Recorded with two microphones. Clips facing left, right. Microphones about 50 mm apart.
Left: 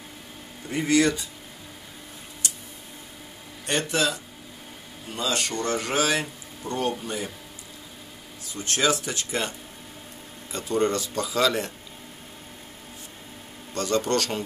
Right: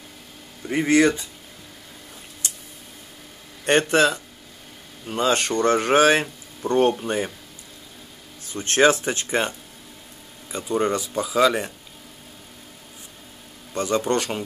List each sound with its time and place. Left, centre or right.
0.7 s speech: right
3.6 s speech: right
8.5 s speech: right
10.5 s speech: centre
13.7 s a man's voice: centre